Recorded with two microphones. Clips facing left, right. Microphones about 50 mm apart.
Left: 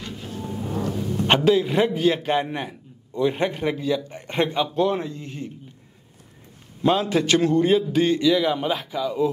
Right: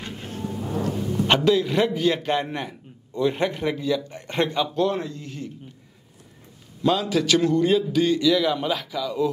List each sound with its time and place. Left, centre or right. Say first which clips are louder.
0.0 s a sound: right 1 dB; right
0.5 s music: left 1 dB; centre
1.2 s a man's voice: left 1 dB; centre
6.8 s a man's voice: left 1 dB; left
8.2 s a man's voice: left 1 dB; centre